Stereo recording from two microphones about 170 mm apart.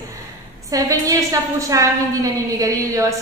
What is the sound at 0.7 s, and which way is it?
A woman's voice, 20° right (ahead or behind).